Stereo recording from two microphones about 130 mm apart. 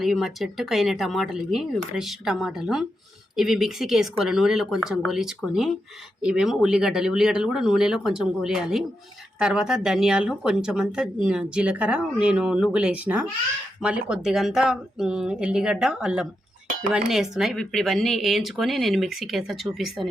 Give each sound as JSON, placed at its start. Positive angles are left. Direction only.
{"t": 0.0, "sound": "speech", "side_deg": 0}